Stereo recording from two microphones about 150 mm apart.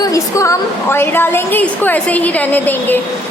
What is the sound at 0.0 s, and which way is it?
A woman's voice, 20° left (ahead or behind).